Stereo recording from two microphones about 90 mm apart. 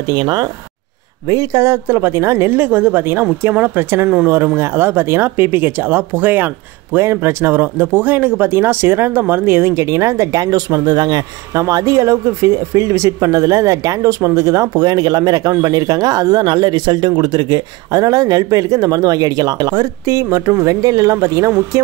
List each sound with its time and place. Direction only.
0.0 s speech: 50° right (ahead or behind)
1.2 s speech: 35° right (ahead or behind)